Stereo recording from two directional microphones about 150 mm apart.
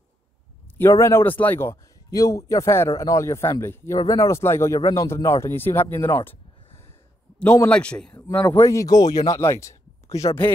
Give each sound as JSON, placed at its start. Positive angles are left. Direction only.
{"t": 0.7, "sound": "speech", "side_deg": 20}
{"t": 7.6, "sound": "speech", "side_deg": 10}